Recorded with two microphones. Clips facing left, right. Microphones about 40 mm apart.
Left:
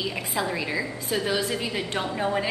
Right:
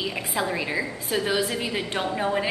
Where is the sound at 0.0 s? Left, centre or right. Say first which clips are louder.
Right 1 dB; centre.